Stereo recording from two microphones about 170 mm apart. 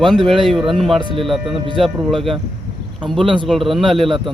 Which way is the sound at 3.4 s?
Centre (ahead or behind).